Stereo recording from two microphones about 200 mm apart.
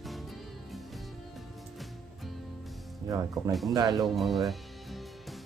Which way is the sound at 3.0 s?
15° right (ahead or behind).